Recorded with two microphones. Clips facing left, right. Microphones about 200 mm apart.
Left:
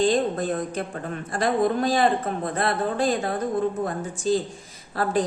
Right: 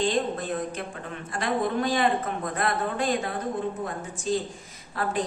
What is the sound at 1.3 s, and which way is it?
A man's voice, 35° left (ahead or behind).